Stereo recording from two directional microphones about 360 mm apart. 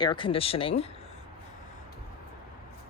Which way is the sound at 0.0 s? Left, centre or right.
Centre.